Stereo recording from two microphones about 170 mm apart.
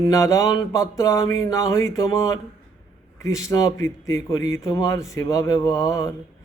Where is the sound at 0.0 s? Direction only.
20° left (ahead or behind).